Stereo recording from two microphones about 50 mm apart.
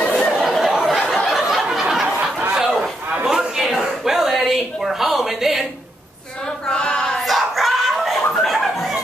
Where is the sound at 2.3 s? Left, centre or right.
Centre.